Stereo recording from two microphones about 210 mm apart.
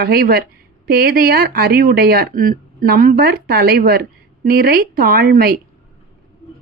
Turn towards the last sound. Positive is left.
turn(degrees=-45)  # may be behind; listen again after turning